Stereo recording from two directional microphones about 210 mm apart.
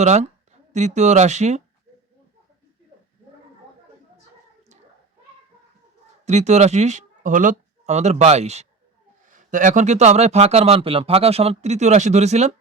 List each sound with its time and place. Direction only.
0.0 s speech: 35° right (ahead or behind)
6.2 s speech: 35° right (ahead or behind)